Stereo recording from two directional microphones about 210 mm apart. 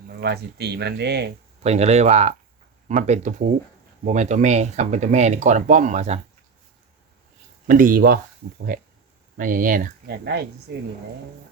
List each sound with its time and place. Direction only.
0.2 s speech: 50° right (ahead or behind)
1.6 s speech: 30° right (ahead or behind)
7.7 s speech: 40° right (ahead or behind)
9.4 s speech: 40° right (ahead or behind)